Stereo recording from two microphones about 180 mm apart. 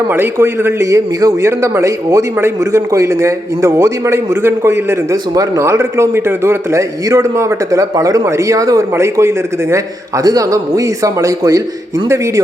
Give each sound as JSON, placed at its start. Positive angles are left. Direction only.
{"t": 0.1, "sound": "a man's voice", "side_deg": -10}